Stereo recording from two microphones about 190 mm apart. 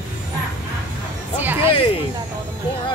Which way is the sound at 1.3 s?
10° right (ahead or behind).